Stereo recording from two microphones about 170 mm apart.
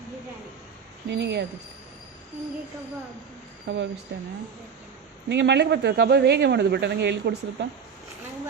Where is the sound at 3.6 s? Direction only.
90° right.